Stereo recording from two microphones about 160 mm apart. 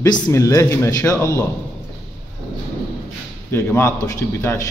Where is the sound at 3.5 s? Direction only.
15° left (ahead or behind).